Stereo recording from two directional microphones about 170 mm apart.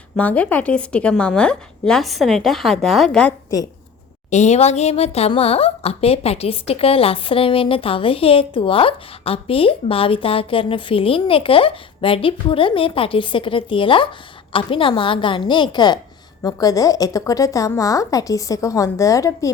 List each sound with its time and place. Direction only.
0.2 s a woman's voice: 10° left (ahead or behind)
4.3 s a woman's voice: 45° left (ahead or behind); by 19.5 s 20° left (ahead or behind)